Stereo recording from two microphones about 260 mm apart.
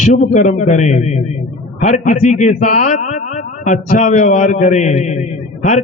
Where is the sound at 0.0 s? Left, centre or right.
Left.